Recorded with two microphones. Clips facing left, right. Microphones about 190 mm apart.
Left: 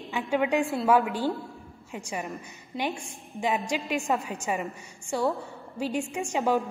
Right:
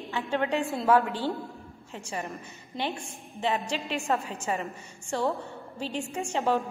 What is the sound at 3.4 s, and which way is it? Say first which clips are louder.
A woman's voice: left 1 dB; 10° left (ahead or behind).